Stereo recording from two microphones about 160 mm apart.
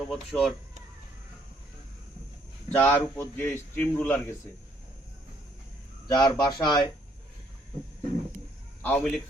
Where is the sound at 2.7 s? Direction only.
15° left (ahead or behind).